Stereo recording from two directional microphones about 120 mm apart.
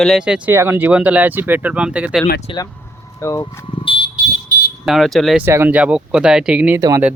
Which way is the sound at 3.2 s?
25° left (ahead or behind).